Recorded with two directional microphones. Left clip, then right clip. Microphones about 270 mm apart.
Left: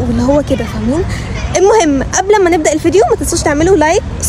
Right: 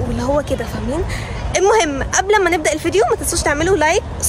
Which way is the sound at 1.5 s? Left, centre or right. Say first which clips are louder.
Left 5 dB; centre.